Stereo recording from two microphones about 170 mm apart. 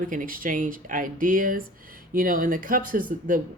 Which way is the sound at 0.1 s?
55° right (ahead or behind).